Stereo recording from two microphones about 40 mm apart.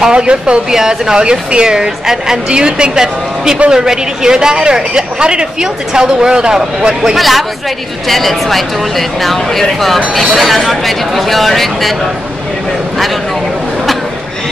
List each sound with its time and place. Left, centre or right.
0.0 s speech: right
7.2 s speech: centre